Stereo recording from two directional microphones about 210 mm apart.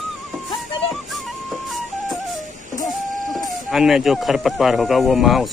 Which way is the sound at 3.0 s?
35° right (ahead or behind).